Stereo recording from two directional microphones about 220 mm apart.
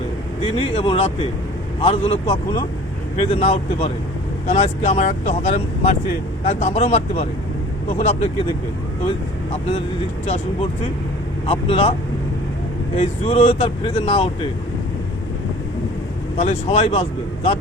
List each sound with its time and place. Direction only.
0.4 s speech: 25° left (ahead or behind)
9.5 s speech: 25° left (ahead or behind)
13.2 s speech: 25° left (ahead or behind)
16.4 s speech: 30° left (ahead or behind)